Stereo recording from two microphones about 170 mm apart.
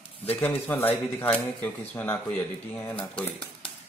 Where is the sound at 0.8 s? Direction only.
10° left (ahead or behind).